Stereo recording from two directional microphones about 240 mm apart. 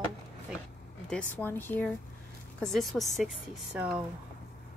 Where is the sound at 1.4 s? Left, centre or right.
Centre.